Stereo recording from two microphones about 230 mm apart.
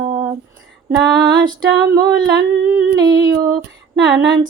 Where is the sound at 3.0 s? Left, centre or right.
Centre.